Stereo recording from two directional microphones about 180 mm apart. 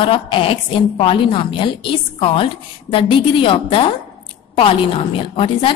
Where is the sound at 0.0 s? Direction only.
30° left (ahead or behind).